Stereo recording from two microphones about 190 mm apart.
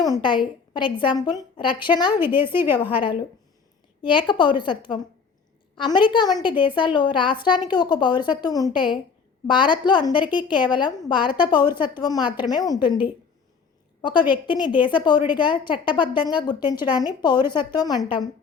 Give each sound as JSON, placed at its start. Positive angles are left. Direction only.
{"t": 0.0, "sound": "a woman's voice", "side_deg": 20}
{"t": 2.1, "sound": "a woman's voice", "side_deg": -10}
{"t": 4.0, "sound": "a woman's voice", "side_deg": 25}
{"t": 14.0, "sound": "a woman's voice", "side_deg": 25}